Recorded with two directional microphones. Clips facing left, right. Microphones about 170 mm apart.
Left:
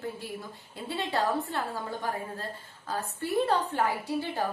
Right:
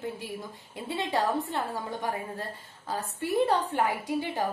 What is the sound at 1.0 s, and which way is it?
A woman's voice, 20° right (ahead or behind).